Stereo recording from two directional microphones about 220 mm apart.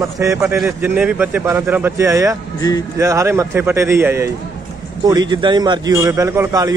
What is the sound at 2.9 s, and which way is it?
A man's voice, 15° right (ahead or behind).